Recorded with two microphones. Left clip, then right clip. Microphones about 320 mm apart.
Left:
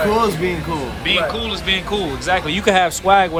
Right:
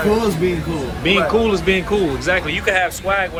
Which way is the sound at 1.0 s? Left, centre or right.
Centre.